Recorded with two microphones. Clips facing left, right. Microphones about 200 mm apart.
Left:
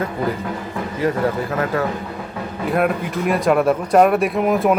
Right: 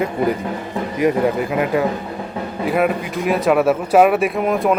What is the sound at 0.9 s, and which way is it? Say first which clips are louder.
Speech: right 3 dB; 15° right (ahead or behind).